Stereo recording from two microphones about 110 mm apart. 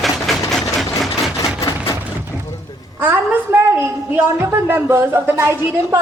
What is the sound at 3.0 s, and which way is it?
A woman's voice, 20° right (ahead or behind).